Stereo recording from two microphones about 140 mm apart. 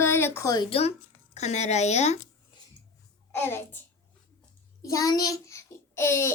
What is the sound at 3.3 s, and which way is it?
Speech, 15° left (ahead or behind).